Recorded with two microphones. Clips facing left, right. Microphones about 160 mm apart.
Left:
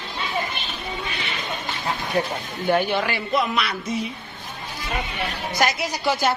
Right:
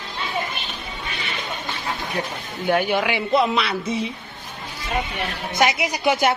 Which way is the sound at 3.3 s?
30° right (ahead or behind).